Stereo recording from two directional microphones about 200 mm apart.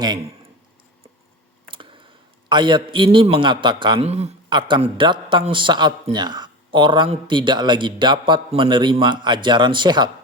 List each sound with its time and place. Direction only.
2.5 s a man's voice: 20° right (ahead or behind)